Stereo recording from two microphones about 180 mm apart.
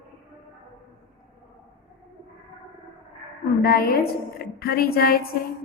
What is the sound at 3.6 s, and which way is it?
A woman's voice, 60° left (ahead or behind).